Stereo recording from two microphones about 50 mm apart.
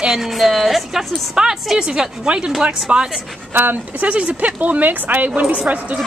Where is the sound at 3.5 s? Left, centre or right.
Right.